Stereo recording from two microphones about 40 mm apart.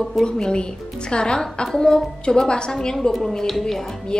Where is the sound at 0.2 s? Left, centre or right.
Left.